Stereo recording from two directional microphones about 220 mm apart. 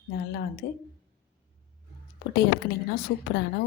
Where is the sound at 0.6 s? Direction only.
45° left (ahead or behind).